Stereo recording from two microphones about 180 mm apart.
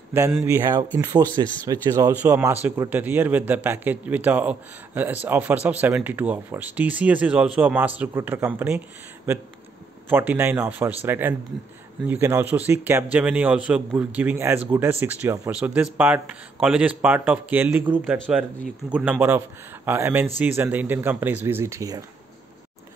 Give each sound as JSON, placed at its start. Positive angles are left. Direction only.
{"t": 0.1, "sound": "speech", "side_deg": -15}
{"t": 18.1, "sound": "speech", "side_deg": 5}
{"t": 18.9, "sound": "speech", "side_deg": -10}